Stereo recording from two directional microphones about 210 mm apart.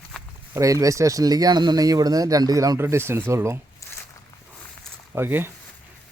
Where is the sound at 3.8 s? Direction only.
15° left (ahead or behind).